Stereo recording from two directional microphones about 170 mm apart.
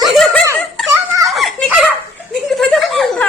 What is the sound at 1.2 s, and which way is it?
Giggle, centre (ahead or behind).